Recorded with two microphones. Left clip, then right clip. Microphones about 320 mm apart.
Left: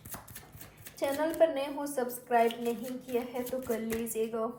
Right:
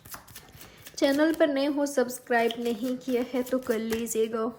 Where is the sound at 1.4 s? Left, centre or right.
Right.